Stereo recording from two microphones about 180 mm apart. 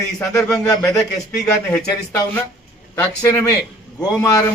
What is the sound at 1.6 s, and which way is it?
A man's voice, 5° left (ahead or behind).